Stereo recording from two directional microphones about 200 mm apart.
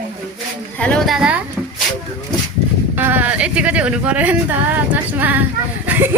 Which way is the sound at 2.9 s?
10° right (ahead or behind).